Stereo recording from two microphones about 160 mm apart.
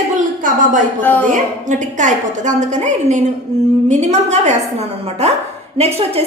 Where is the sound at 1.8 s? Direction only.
50° right (ahead or behind).